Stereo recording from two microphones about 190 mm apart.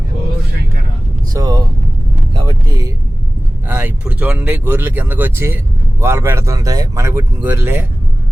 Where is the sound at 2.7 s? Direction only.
15° right (ahead or behind).